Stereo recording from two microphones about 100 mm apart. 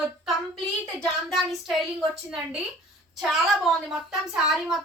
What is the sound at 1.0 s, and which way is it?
A woman's voice, centre (ahead or behind).